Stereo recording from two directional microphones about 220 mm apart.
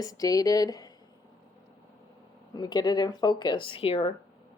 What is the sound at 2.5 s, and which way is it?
Speech, 20° left (ahead or behind).